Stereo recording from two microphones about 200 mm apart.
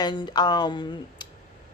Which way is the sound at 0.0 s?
20° left (ahead or behind).